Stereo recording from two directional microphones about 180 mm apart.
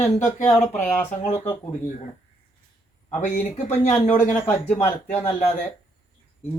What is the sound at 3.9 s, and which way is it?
Speech, 15° left (ahead or behind).